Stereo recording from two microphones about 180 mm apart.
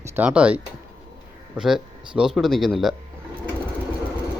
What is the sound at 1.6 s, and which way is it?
Speech, 5° right (ahead or behind).